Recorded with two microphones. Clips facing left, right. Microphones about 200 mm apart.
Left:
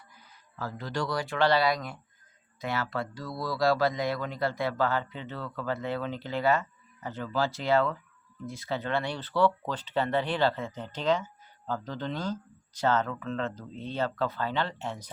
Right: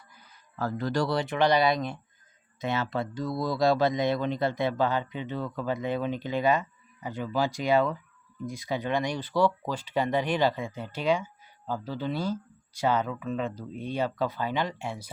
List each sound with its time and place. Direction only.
0.6 s speech: 45° right (ahead or behind)
1.0 s speech: 25° right (ahead or behind)